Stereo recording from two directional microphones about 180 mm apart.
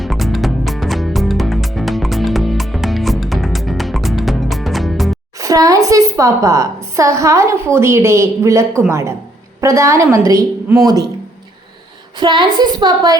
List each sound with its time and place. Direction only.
0.0 s music: centre (ahead or behind)
5.4 s a woman's voice: 20° right (ahead or behind)
12.2 s a woman's voice: 25° right (ahead or behind)